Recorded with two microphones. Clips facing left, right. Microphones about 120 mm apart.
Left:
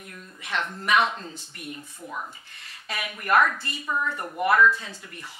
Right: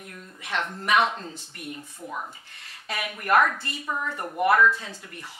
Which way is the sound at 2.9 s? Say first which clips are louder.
Right 1 dB; 50° right (ahead or behind).